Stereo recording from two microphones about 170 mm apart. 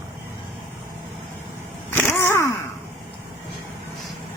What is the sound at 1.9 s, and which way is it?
Vehicle, 15° left (ahead or behind).